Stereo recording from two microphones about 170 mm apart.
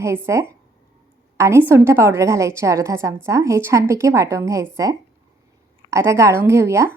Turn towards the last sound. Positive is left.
turn(degrees=-15)  # may be behind; listen again after turning